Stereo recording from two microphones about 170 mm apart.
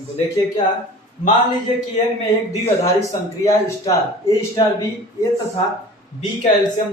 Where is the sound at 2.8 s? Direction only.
20° left (ahead or behind).